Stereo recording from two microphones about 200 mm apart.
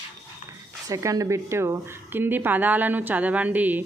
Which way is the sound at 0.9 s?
15° right (ahead or behind).